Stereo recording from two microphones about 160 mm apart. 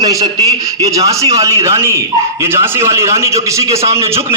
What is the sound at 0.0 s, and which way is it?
A man's voice, 20° right (ahead or behind).